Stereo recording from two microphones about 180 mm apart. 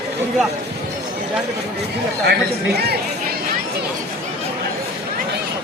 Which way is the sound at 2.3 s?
65° right (ahead or behind).